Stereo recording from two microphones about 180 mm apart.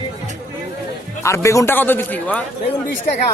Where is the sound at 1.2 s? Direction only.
15° left (ahead or behind).